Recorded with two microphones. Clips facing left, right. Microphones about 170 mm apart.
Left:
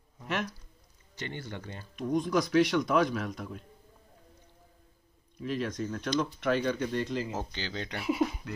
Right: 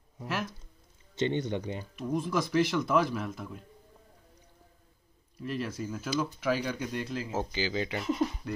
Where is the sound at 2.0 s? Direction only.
5° right (ahead or behind).